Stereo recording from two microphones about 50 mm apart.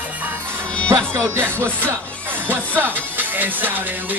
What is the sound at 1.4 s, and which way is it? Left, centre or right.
Music, right.